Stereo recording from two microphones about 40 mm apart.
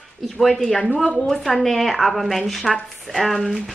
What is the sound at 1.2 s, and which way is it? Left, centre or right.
Speech, centre.